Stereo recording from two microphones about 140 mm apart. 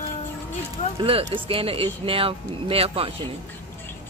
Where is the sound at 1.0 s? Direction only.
40° right (ahead or behind).